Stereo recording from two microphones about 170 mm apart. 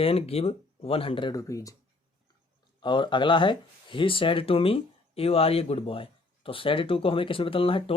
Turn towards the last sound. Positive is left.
turn(degrees=30)  # may be behind; listen again after turning